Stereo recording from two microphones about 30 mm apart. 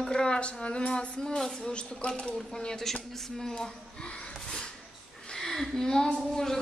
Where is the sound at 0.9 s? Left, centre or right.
Left.